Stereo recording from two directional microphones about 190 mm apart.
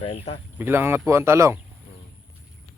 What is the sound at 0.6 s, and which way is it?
Speech, 10° right (ahead or behind).